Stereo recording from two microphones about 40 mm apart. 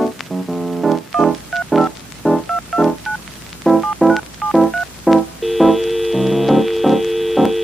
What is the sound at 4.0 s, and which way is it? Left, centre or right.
Music, centre.